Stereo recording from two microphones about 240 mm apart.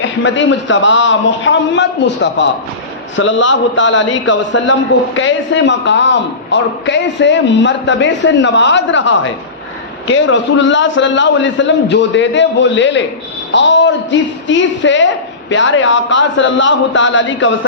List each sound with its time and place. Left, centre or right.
0.0 s a man's voice: left